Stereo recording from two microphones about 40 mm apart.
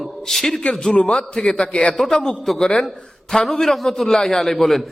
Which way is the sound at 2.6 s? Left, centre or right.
Centre.